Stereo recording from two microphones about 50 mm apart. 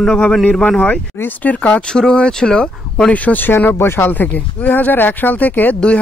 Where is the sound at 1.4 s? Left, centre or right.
Left.